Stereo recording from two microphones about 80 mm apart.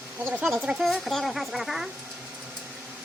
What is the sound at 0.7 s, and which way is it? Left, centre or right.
Speech, centre.